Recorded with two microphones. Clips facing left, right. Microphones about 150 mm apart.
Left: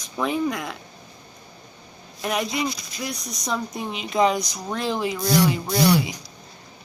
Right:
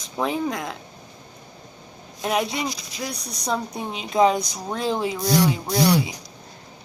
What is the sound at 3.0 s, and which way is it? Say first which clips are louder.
Speech: even; 35° right (ahead or behind).